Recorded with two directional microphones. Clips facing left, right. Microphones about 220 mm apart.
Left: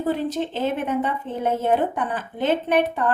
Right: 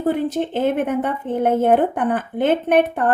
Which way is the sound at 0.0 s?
55° right (ahead or behind).